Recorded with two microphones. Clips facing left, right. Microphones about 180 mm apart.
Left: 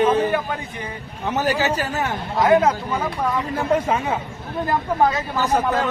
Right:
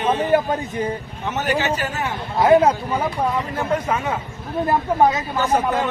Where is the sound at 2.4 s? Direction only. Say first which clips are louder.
Right 2 dB; 30° right (ahead or behind).